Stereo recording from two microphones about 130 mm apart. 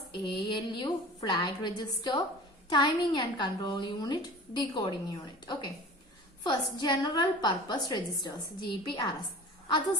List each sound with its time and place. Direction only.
0.3 s speech: 40° left (ahead or behind)